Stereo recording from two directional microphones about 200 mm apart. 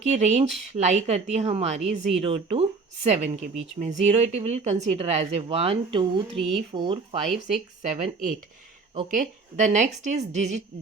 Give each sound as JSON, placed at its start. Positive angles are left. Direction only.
{"t": 0.0, "sound": "speech", "side_deg": -35}